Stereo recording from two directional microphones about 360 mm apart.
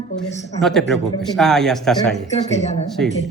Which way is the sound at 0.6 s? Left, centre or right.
Centre.